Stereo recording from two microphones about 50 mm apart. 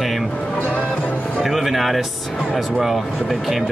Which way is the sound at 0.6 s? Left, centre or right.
Left.